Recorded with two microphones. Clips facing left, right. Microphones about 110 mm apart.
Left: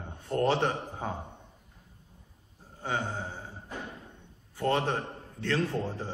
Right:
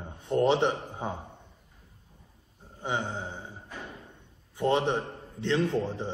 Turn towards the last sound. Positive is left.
turn(degrees=-20)  # may be behind; listen again after turning